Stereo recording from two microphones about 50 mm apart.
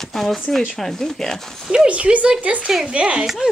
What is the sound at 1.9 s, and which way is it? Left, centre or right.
Speech, right.